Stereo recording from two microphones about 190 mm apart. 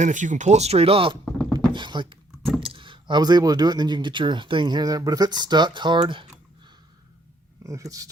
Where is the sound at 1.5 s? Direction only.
25° right (ahead or behind).